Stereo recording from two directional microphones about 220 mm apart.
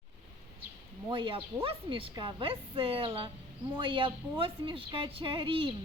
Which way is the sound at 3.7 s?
25° right (ahead or behind).